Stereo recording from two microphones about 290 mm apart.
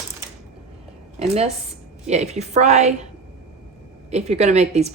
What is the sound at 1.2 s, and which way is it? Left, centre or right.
Speech, right.